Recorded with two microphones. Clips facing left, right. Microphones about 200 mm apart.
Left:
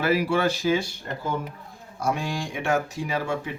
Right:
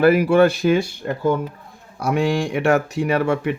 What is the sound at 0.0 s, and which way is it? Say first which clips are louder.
Speech: right 9 dB; 55° right (ahead or behind).